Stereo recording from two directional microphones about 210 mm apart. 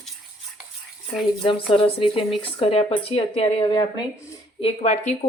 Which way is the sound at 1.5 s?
25° left (ahead or behind).